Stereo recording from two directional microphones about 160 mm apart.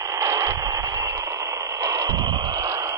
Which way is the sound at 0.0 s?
20° right (ahead or behind).